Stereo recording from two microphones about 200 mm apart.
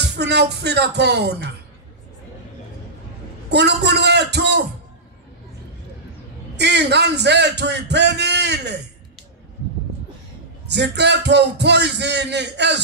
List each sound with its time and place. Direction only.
0.1 s speech: 55° right (ahead or behind)
3.4 s speech: 60° right (ahead or behind)
6.5 s speech: 60° right (ahead or behind)
10.7 s speech: 60° right (ahead or behind)